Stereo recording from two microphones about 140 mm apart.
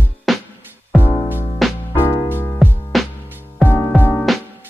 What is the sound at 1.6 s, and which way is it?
Music, centre (ahead or behind).